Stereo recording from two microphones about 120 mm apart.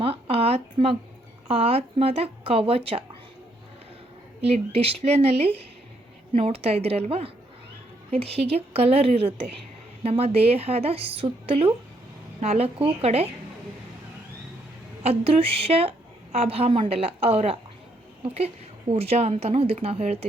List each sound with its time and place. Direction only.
0.0 s speech: 50° right (ahead or behind)
4.4 s a woman's voice: 60° right (ahead or behind)
15.0 s a woman's voice: 55° right (ahead or behind)